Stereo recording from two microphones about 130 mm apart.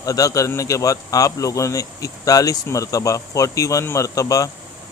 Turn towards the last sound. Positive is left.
turn(degrees=25)  # may be behind; listen again after turning